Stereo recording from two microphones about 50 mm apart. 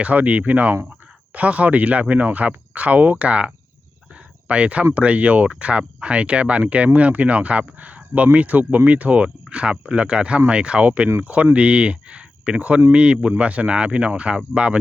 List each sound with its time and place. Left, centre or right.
0.0 s speech: right
4.1 s a sound: right
4.9 s speech: right